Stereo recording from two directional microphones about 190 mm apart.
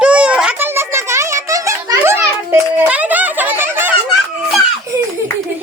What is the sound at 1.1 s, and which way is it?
Music, 15° right (ahead or behind).